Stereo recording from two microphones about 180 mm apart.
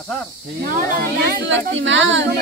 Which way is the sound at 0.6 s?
55° right (ahead or behind).